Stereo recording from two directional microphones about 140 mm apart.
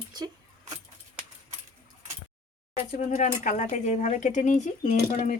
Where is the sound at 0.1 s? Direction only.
30° right (ahead or behind).